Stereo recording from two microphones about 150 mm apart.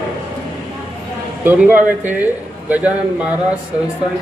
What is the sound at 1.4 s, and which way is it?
Speech, 10° right (ahead or behind).